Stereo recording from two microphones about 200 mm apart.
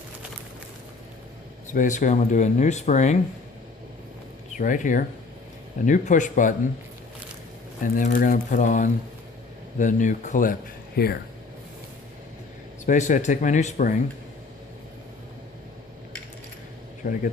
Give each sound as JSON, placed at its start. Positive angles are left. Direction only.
{"t": 1.7, "sound": "speech", "side_deg": 40}
{"t": 4.5, "sound": "speech", "side_deg": 40}
{"t": 7.9, "sound": "speech", "side_deg": 40}
{"t": 12.8, "sound": "speech", "side_deg": 35}
{"t": 17.0, "sound": "speech", "side_deg": 45}